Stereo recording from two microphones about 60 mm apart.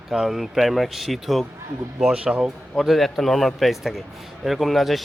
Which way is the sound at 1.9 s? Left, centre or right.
Centre.